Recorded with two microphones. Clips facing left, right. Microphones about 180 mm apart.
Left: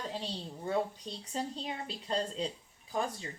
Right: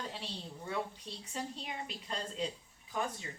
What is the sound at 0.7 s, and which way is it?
Speech, 35° left (ahead or behind).